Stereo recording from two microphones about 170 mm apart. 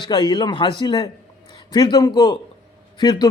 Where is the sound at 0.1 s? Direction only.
25° left (ahead or behind).